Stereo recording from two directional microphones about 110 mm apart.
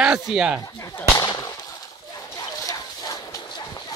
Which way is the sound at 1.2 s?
35° left (ahead or behind).